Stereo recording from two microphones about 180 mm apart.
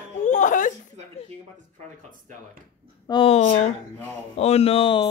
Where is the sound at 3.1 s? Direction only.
30° left (ahead or behind).